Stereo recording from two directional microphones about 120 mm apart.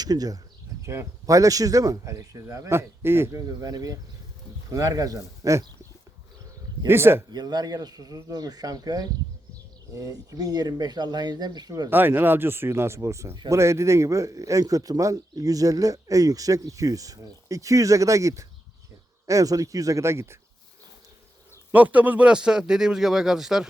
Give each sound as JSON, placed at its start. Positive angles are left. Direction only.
{"t": 0.0, "sound": "a man's voice", "side_deg": -30}
{"t": 6.8, "sound": "a man's voice", "side_deg": -20}
{"t": 7.3, "sound": "speech", "side_deg": -35}
{"t": 11.9, "sound": "a man's voice", "side_deg": -15}
{"t": 21.7, "sound": "speech", "side_deg": -15}